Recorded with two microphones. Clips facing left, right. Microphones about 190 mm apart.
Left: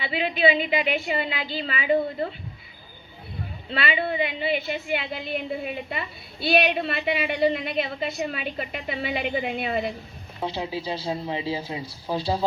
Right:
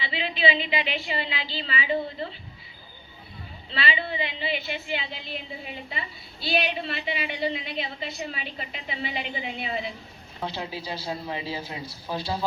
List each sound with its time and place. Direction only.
0.0 s a woman's voice: 50° left (ahead or behind)
3.7 s a woman's voice: 55° left (ahead or behind)
10.4 s speech: 20° left (ahead or behind)